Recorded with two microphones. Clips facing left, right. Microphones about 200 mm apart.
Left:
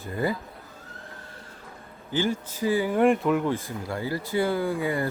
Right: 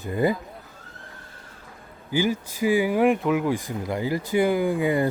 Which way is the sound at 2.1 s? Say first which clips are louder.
Right 3 dB; 10° right (ahead or behind).